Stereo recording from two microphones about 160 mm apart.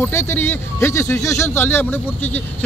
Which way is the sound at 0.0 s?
15° left (ahead or behind).